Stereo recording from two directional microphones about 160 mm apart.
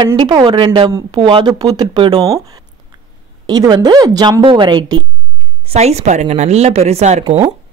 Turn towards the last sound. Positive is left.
turn(degrees=-45)  # may be behind; listen again after turning